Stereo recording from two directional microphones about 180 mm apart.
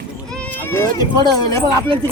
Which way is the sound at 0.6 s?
15° left (ahead or behind).